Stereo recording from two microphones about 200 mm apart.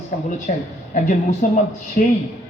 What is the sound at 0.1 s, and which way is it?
A man's voice, 45° left (ahead or behind).